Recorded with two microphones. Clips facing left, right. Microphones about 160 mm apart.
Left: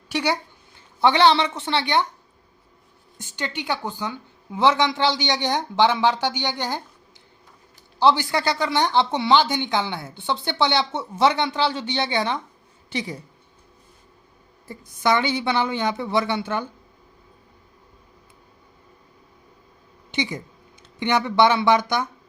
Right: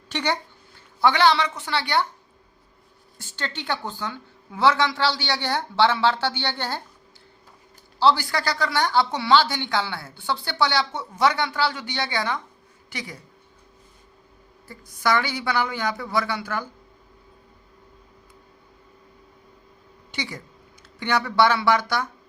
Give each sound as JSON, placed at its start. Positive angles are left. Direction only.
{"t": 0.1, "sound": "speech", "side_deg": 10}
{"t": 1.0, "sound": "speech", "side_deg": 25}
{"t": 3.2, "sound": "a woman's voice", "side_deg": 15}
{"t": 7.9, "sound": "speech", "side_deg": 20}
{"t": 14.7, "sound": "speech", "side_deg": 20}
{"t": 20.1, "sound": "speech", "side_deg": 20}